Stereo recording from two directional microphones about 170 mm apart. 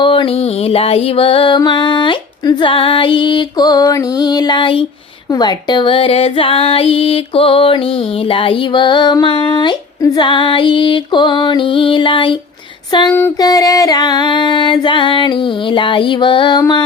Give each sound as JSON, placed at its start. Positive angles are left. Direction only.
{"t": 0.0, "sound": "music", "side_deg": 30}
{"t": 5.3, "sound": "female singing", "side_deg": 25}
{"t": 8.3, "sound": "music", "side_deg": 30}
{"t": 13.1, "sound": "female singing", "side_deg": 10}
{"t": 13.4, "sound": "music", "side_deg": 20}